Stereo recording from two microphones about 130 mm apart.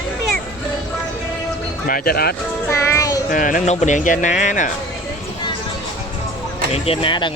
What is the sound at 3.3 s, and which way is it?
Speech, 90° left.